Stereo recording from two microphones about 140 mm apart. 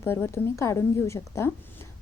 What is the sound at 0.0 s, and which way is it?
A woman's voice, 15° left (ahead or behind).